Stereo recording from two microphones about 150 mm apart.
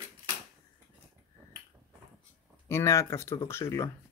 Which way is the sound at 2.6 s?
15° left (ahead or behind).